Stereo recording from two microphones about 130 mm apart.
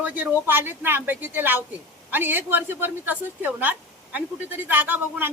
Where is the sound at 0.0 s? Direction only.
15° right (ahead or behind).